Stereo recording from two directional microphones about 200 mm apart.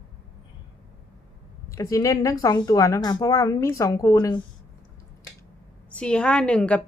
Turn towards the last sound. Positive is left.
turn(degrees=5)  # may be behind; listen again after turning